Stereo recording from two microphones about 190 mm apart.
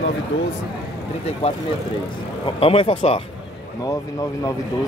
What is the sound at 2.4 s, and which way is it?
Speech, 30° left (ahead or behind).